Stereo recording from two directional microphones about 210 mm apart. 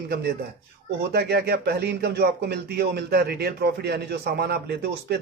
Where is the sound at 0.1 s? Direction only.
45° right (ahead or behind).